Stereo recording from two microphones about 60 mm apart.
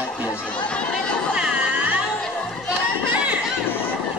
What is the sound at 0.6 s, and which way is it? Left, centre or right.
Chatter, centre.